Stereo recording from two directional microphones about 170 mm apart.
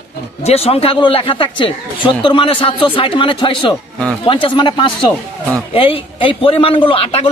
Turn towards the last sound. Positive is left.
turn(degrees=35)  # may be behind; listen again after turning